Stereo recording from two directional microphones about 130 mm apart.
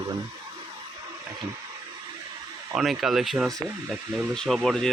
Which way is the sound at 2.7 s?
Centre (ahead or behind).